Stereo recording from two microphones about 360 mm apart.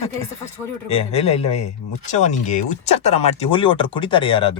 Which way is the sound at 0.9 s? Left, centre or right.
Centre.